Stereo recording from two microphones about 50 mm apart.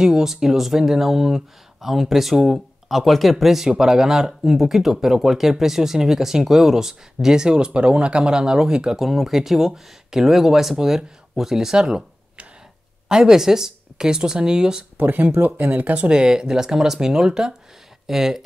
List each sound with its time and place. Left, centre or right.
0.0 s speech: centre
13.1 s speech: centre
15.0 s speech: right
15.9 s speech: centre